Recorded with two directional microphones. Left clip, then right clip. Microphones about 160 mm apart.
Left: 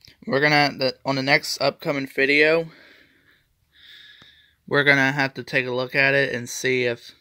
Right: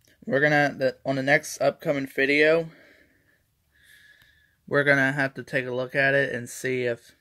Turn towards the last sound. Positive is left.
turn(degrees=25)  # may be behind; listen again after turning